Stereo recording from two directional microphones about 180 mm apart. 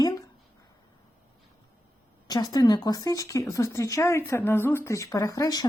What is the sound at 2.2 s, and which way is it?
Speech, 20° left (ahead or behind).